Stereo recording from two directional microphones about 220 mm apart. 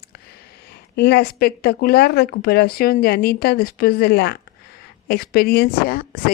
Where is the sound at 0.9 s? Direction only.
45° left (ahead or behind).